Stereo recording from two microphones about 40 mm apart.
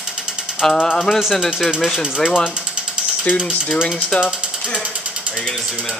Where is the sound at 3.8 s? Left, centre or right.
Left.